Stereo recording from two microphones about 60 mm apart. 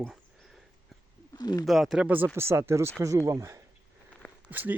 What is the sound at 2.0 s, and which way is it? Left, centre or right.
Speech, right.